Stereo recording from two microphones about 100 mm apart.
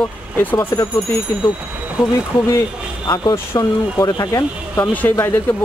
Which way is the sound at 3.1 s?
40° left (ahead or behind).